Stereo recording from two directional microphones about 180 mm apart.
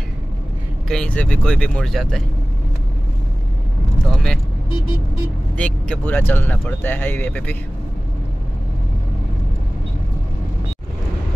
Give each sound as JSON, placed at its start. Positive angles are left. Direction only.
{"t": 0.8, "sound": "speech", "side_deg": 5}
{"t": 4.1, "sound": "speech", "side_deg": 0}
{"t": 5.6, "sound": "speech", "side_deg": 10}